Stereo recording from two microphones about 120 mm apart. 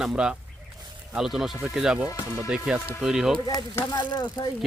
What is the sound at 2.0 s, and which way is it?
Speech, 30° left (ahead or behind).